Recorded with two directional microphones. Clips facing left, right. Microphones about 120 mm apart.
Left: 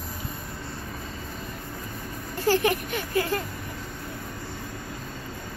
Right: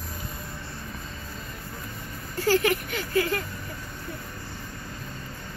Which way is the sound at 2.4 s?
25° left (ahead or behind).